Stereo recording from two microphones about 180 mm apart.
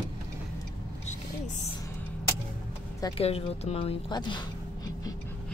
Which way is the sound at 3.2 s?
35° left (ahead or behind).